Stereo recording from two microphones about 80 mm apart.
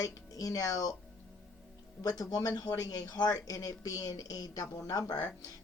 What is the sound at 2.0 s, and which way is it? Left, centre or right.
A woman's voice, left.